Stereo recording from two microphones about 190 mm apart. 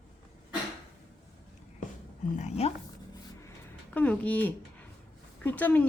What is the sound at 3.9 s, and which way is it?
A woman's voice, 5° left (ahead or behind).